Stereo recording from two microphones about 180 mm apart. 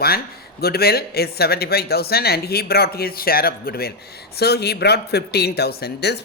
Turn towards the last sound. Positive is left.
turn(degrees=65)  # may be behind; listen again after turning